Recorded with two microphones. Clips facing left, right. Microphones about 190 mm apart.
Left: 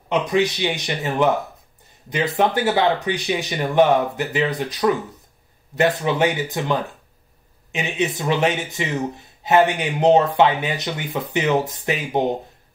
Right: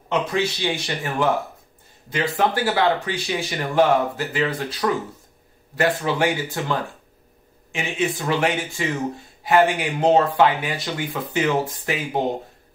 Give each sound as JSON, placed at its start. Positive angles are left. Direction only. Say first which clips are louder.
{"t": 0.1, "sound": "speech", "louder": "left 3 dB", "side_deg": 15}